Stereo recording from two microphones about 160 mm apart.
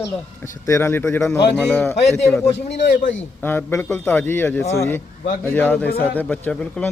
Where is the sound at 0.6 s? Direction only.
15° left (ahead or behind).